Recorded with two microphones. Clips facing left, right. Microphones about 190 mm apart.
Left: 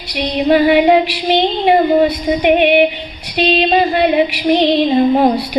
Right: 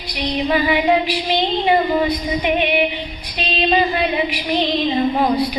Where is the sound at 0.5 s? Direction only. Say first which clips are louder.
Left 7 dB; 65° left (ahead or behind).